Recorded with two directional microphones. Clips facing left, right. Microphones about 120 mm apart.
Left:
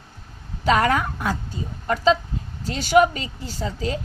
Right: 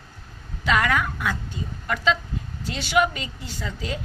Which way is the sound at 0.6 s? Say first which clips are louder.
Left 3 dB; 40° left (ahead or behind).